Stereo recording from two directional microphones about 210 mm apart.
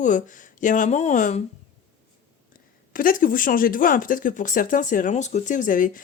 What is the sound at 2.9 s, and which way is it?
Speech, 40° left (ahead or behind).